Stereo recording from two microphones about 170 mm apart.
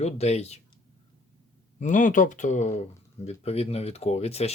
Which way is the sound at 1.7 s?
50° left (ahead or behind).